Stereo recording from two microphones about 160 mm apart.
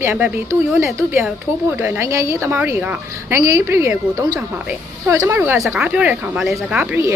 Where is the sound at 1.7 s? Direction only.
15° right (ahead or behind).